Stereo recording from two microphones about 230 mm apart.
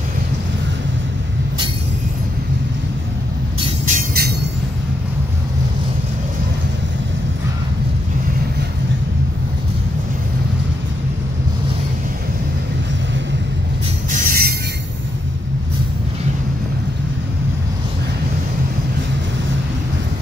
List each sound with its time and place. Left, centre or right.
3.9 s train: right
14.1 s train: right